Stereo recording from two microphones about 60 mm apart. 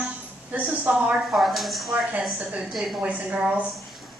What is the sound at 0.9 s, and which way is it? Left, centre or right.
Speech, centre.